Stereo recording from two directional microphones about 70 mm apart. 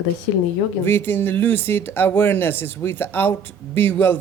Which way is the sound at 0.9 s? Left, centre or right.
Left.